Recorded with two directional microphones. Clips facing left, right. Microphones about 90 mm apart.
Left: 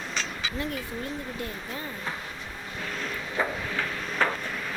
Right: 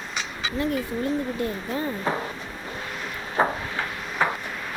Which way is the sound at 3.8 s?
15° right (ahead or behind).